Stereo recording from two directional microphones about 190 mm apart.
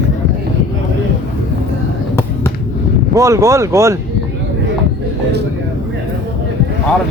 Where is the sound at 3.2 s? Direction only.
15° right (ahead or behind).